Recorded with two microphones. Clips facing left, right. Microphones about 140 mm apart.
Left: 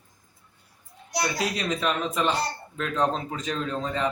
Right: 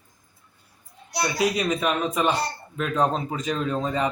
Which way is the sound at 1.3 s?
10° right (ahead or behind).